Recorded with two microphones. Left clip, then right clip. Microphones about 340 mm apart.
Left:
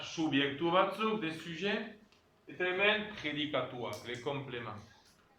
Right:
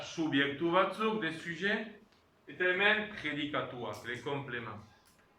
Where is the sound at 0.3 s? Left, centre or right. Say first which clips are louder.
Right 1 dB; centre.